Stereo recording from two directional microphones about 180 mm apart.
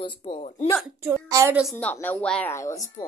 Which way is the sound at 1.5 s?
Centre (ahead or behind).